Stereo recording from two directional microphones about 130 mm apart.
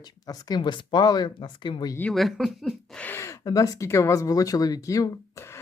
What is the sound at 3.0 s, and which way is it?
Speech, 20° left (ahead or behind).